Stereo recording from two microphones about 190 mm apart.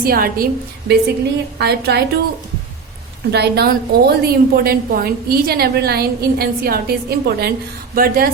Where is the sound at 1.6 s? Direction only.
60° right (ahead or behind).